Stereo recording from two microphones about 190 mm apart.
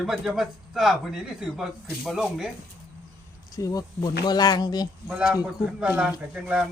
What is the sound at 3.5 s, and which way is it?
Speech, 20° left (ahead or behind).